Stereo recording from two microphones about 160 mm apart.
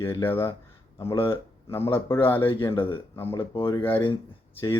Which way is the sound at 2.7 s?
35° left (ahead or behind).